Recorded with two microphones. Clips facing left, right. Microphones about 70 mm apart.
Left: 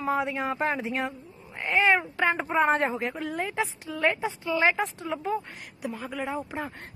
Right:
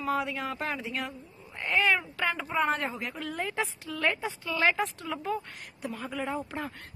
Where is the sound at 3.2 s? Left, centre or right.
Centre.